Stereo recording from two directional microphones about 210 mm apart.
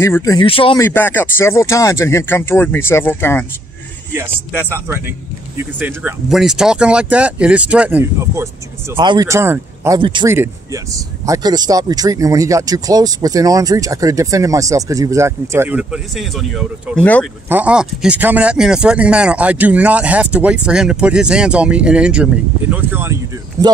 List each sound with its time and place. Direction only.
0.0 s speech: 15° left (ahead or behind)
0.8 s speech: 10° left (ahead or behind)
4.1 s speech: 10° right (ahead or behind)
9.9 s a man's voice: 25° right (ahead or behind); by 17.3 s 5° left (ahead or behind)
17.5 s speech: 5° right (ahead or behind)